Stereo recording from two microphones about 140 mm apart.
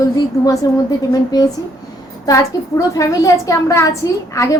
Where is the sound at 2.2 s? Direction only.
25° left (ahead or behind).